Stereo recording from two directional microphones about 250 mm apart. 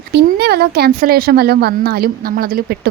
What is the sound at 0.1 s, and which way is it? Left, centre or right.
A woman's voice, right.